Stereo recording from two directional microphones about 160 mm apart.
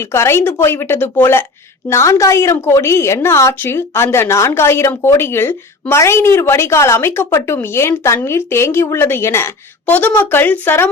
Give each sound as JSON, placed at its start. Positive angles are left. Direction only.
{"t": 0.0, "sound": "a woman's voice", "side_deg": 15}